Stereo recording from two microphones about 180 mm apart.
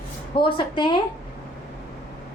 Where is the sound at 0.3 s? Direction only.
25° left (ahead or behind).